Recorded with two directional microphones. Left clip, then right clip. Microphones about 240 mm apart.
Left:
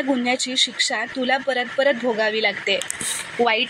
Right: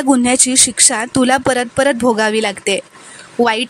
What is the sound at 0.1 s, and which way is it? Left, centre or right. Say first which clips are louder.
Speech: right 9 dB; right.